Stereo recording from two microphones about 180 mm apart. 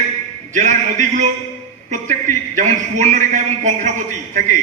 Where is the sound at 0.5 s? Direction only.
45° right (ahead or behind).